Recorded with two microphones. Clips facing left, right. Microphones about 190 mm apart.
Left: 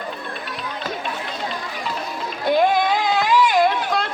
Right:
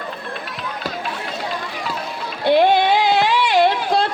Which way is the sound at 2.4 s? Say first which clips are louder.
Right 3 dB; 30° right (ahead or behind).